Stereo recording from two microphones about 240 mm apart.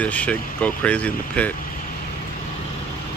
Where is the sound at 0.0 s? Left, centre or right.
Centre.